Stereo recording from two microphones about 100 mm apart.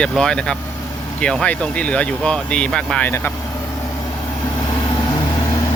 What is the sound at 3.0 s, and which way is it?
Speech, 25° left (ahead or behind).